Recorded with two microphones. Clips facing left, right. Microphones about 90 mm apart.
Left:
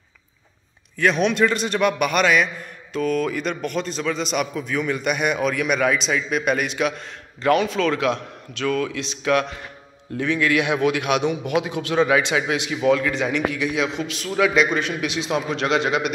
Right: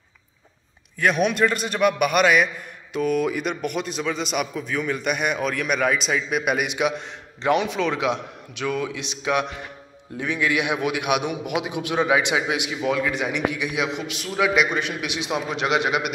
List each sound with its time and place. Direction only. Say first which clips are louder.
0.9 s a man's voice: left 1 dB; 5° right (ahead or behind)